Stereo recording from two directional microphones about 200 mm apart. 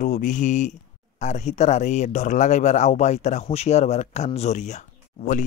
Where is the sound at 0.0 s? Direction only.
40° left (ahead or behind).